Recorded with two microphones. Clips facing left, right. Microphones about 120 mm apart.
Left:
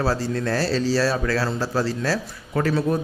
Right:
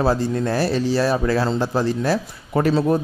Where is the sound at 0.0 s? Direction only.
20° right (ahead or behind).